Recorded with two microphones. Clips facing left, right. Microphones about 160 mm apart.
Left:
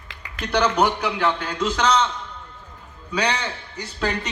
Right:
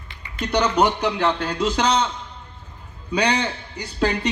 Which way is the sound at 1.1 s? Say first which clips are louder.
Right 1 dB; 35° right (ahead or behind).